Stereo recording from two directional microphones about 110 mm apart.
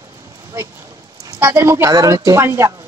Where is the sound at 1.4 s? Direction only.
20° right (ahead or behind).